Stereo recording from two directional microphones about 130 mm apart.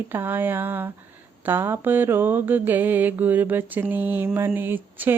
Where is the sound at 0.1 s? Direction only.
15° right (ahead or behind).